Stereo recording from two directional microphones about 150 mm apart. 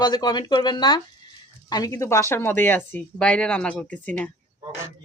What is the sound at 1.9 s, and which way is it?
Speech, 20° left (ahead or behind).